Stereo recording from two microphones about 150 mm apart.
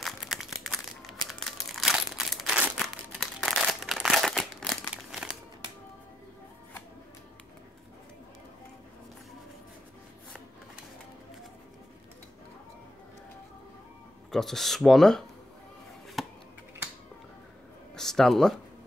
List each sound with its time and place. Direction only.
0.0 s crumpling: centre (ahead or behind)
14.3 s speech: centre (ahead or behind)
16.2 s chop: centre (ahead or behind)
17.9 s speech: 5° left (ahead or behind)